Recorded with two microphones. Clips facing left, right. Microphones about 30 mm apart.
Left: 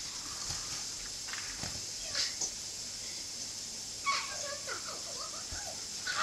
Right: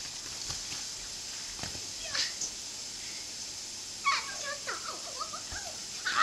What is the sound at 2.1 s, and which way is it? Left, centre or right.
Cat, right.